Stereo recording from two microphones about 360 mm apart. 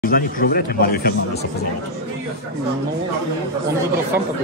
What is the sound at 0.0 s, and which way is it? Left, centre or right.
Speech, left.